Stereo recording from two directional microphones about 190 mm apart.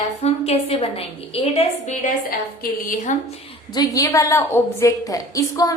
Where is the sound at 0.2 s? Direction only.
35° left (ahead or behind).